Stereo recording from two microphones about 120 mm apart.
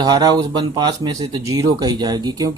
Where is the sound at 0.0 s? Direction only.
35° right (ahead or behind).